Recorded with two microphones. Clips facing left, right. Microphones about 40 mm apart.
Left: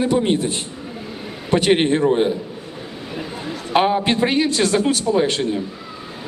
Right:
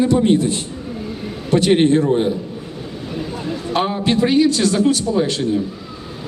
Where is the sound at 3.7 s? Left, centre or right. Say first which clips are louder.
Left 2 dB; left.